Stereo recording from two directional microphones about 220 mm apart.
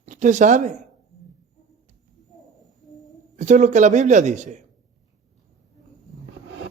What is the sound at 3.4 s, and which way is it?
Speech, 35° right (ahead or behind).